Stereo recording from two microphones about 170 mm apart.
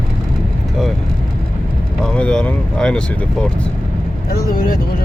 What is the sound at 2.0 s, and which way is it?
Speech, 5° left (ahead or behind).